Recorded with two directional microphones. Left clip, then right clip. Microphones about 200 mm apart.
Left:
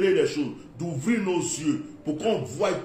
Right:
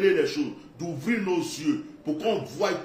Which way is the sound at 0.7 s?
Centre (ahead or behind).